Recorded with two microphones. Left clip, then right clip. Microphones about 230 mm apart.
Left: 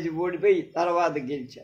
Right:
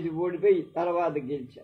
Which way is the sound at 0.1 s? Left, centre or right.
Left.